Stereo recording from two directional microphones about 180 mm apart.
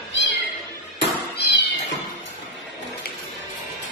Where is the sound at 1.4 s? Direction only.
70° left (ahead or behind).